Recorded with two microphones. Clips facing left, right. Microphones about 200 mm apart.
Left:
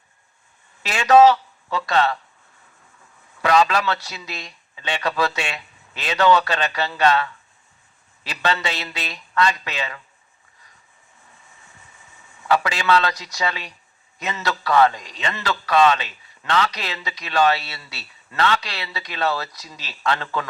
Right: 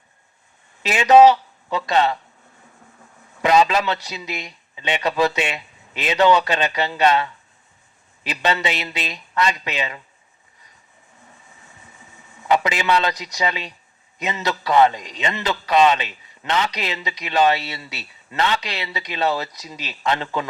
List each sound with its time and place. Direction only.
0.8 s speech: 20° right (ahead or behind)
3.4 s a man's voice: 20° right (ahead or behind)
12.5 s a man's voice: 20° right (ahead or behind)